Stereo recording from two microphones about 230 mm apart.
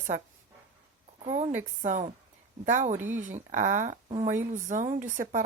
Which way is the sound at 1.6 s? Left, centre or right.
Right.